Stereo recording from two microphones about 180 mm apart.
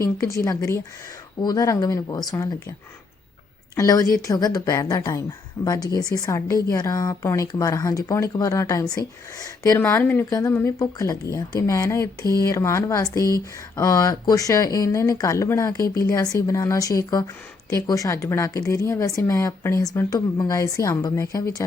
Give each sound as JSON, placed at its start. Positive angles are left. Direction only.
{"t": 0.0, "sound": "speech", "side_deg": 15}
{"t": 3.8, "sound": "speech", "side_deg": 20}